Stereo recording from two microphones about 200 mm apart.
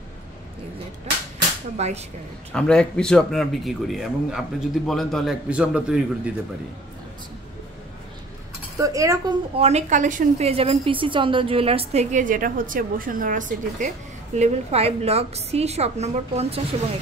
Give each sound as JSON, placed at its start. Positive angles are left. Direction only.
{"t": 1.8, "sound": "a woman's voice", "side_deg": -35}
{"t": 2.5, "sound": "a man's voice", "side_deg": 5}
{"t": 8.7, "sound": "speech", "side_deg": -15}
{"t": 9.6, "sound": "a woman's voice", "side_deg": -35}